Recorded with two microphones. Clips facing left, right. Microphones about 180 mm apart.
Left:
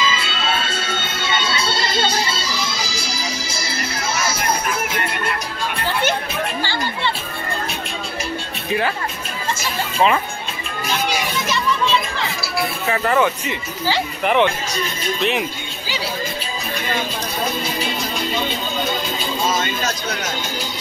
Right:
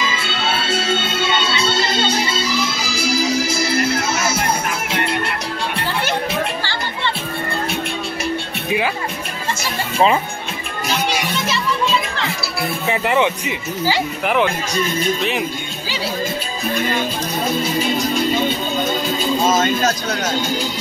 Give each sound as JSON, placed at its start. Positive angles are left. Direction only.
{"t": 12.9, "sound": "speech", "side_deg": -15}
{"t": 19.5, "sound": "speech", "side_deg": -45}